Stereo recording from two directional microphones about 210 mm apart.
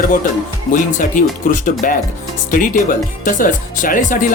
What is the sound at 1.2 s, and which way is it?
Speech, 40° left (ahead or behind).